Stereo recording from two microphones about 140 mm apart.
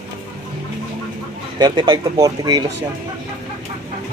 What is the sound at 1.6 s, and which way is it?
Speech, 35° right (ahead or behind).